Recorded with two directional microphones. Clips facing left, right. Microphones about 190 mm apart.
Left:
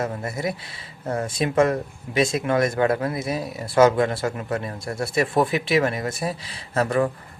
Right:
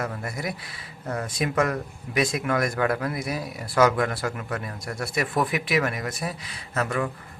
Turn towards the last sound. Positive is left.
turn(degrees=35)  # may be behind; listen again after turning